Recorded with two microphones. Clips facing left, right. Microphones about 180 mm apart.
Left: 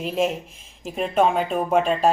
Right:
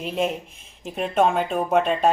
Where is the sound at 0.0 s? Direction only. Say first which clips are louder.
Left 2 dB; centre (ahead or behind).